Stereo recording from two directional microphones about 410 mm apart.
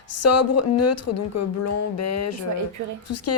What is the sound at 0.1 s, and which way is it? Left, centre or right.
A woman's voice, left.